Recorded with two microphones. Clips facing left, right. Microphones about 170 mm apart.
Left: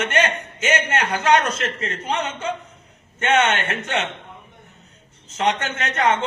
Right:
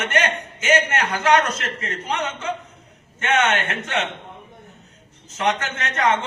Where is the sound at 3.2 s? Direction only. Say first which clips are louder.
Left 1 dB; 30° left (ahead or behind).